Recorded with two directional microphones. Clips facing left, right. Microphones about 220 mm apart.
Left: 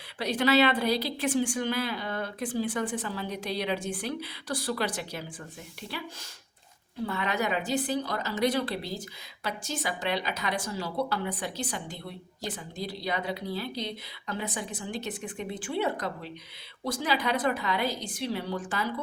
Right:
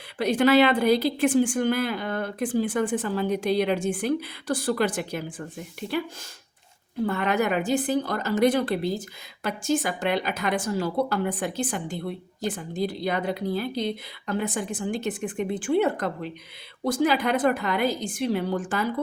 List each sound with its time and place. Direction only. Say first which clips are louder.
0.2 s a woman's voice: right 5 dB; 50° right (ahead or behind)
7.0 s a woman's voice: right 6 dB; 50° right (ahead or behind)